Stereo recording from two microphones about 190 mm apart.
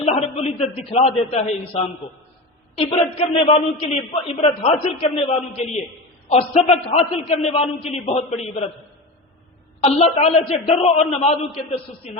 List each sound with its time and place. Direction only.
0.0 s a man's voice: 30° left (ahead or behind)
9.8 s a man's voice: 35° left (ahead or behind)